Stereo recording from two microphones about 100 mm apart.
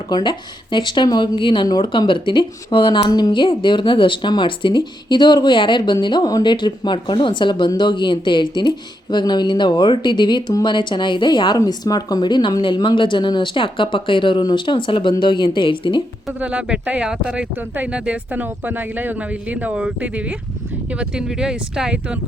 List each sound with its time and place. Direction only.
0.1 s speech: 50° left (ahead or behind)
11.5 s speech: 40° left (ahead or behind); by 16.0 s 55° left (ahead or behind)
16.4 s speech: 10° right (ahead or behind)